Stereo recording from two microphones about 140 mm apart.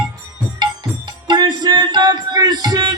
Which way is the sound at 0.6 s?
30° right (ahead or behind).